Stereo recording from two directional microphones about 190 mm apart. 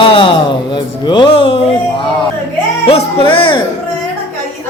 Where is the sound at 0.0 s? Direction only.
25° left (ahead or behind).